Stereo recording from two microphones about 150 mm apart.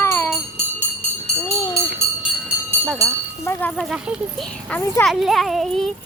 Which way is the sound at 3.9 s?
5° right (ahead or behind).